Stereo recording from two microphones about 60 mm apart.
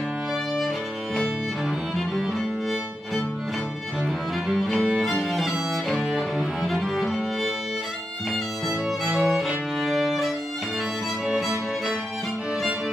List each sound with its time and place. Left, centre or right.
4.6 s music: centre
8.6 s music: centre
9.8 s violin: centre